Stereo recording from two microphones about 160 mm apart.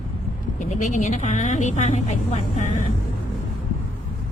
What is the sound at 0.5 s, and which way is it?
A woman's voice, 50° left (ahead or behind).